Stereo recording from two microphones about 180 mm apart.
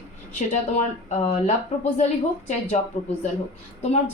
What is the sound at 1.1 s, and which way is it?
Speech, 40° left (ahead or behind).